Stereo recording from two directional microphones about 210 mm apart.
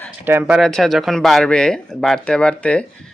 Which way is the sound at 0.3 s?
5° right (ahead or behind).